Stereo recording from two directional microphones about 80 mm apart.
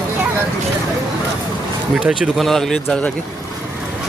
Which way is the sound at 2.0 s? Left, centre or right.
Centre.